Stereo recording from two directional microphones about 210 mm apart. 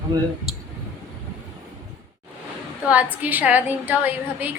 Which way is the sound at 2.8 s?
5° right (ahead or behind).